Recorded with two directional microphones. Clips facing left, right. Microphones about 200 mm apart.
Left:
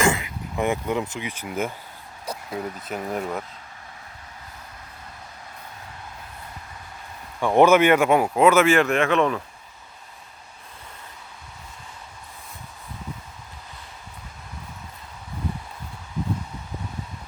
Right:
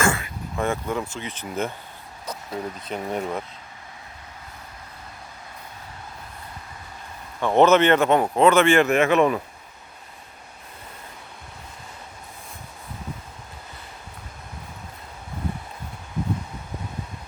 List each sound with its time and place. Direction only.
0.0 s speech: 15° left (ahead or behind); by 3.4 s centre (ahead or behind)
7.4 s speech: 10° left (ahead or behind); by 9.4 s 10° right (ahead or behind)